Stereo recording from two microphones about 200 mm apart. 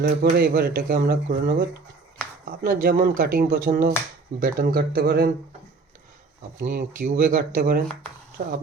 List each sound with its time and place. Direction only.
0.0 s speech: 50° right (ahead or behind)
6.6 s speech: 45° right (ahead or behind)
8.4 s speech: 35° right (ahead or behind)